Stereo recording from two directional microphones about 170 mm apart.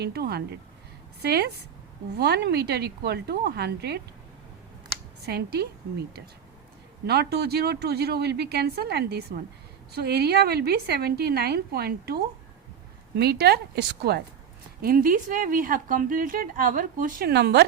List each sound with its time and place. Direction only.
0.0 s a woman's voice: 70° right (ahead or behind)
5.2 s a woman's voice: 70° right (ahead or behind)
7.1 s a woman's voice: 70° right (ahead or behind)
14.8 s speech: 60° right (ahead or behind); by 17.7 s 75° right (ahead or behind)